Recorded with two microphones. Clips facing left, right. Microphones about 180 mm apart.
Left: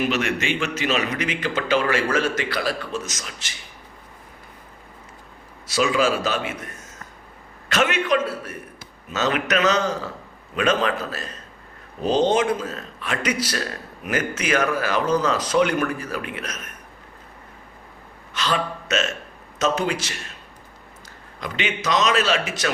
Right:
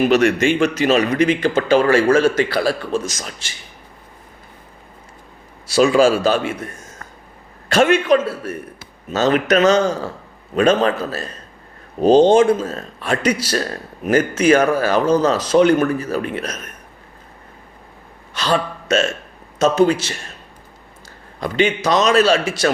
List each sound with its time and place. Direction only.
0.0 s speech: 45° right (ahead or behind); by 1.7 s 30° right (ahead or behind)
1.7 s a man's voice: 40° right (ahead or behind)
2.1 s speech: 30° right (ahead or behind)
5.8 s speech: 35° right (ahead or behind)
7.7 s speech: 30° right (ahead or behind)
18.3 s a man's voice: 35° right (ahead or behind)
21.4 s speech: 35° right (ahead or behind)